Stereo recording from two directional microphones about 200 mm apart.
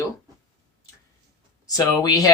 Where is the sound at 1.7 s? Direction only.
20° left (ahead or behind).